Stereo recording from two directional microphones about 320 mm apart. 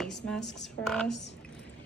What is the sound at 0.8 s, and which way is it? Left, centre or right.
Speech, centre.